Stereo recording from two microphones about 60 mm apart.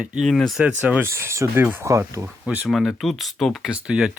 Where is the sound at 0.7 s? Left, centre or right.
Right.